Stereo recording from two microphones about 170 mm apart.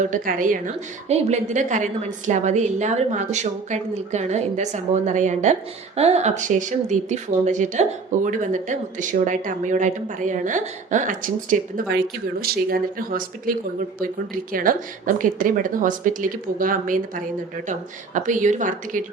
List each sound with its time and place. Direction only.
0.0 s speech: 50° right (ahead or behind)